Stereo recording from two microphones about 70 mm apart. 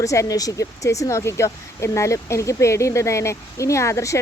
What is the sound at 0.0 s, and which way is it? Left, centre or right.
Speech, left.